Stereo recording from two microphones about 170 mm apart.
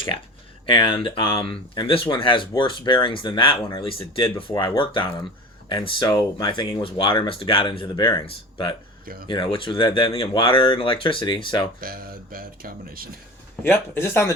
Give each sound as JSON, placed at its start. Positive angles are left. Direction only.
{"t": 0.7, "sound": "speech", "side_deg": 30}
{"t": 11.8, "sound": "speech", "side_deg": -60}
{"t": 13.6, "sound": "speech", "side_deg": 15}